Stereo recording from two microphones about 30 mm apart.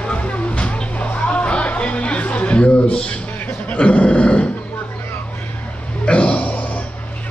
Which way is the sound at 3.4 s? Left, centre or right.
Left.